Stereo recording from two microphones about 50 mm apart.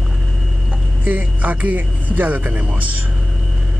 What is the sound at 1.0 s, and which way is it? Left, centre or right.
Speech, right.